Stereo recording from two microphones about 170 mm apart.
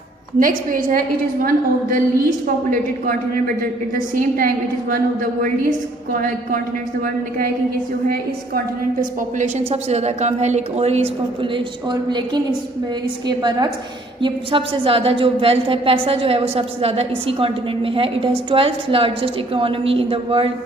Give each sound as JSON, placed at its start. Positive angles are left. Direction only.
{"t": 0.3, "sound": "a woman's voice", "side_deg": -55}
{"t": 3.9, "sound": "a woman's voice", "side_deg": -55}
{"t": 8.1, "sound": "a woman's voice", "side_deg": -55}
{"t": 11.5, "sound": "a woman's voice", "side_deg": -25}
{"t": 14.2, "sound": "a woman's voice", "side_deg": -30}